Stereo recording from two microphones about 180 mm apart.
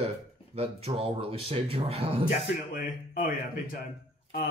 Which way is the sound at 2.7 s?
50° left (ahead or behind).